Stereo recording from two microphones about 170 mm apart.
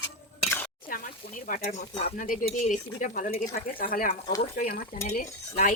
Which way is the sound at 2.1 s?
55° left (ahead or behind).